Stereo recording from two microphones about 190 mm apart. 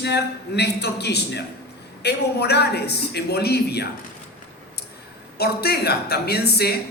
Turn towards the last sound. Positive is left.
turn(degrees=55)  # may be behind; listen again after turning